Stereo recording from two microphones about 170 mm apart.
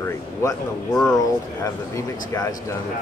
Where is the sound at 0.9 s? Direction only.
5° left (ahead or behind).